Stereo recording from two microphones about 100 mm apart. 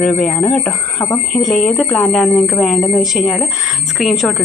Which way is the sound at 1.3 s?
5° left (ahead or behind).